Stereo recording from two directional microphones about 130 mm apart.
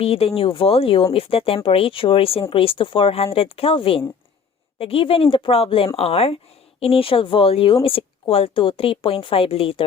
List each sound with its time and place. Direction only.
0.0 s speech: 50° left (ahead or behind)